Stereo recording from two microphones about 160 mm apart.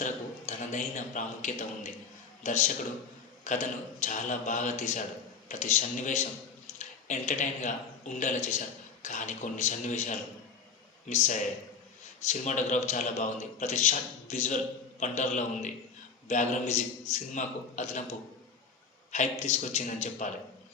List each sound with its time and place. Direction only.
0.0 s a man's voice: 50° left (ahead or behind)